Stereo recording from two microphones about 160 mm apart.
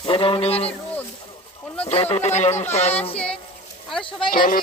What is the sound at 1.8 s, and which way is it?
Speech, 40° left (ahead or behind).